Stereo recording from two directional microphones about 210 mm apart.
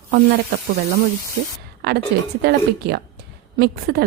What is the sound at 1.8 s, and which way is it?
A woman's voice, 50° right (ahead or behind).